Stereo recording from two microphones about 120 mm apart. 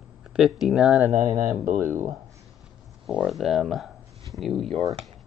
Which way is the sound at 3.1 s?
5° right (ahead or behind).